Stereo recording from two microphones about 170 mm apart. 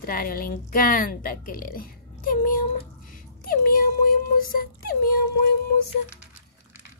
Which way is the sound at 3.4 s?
55° left (ahead or behind).